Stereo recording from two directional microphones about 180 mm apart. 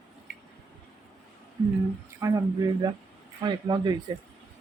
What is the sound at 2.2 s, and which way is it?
Speech, 20° right (ahead or behind).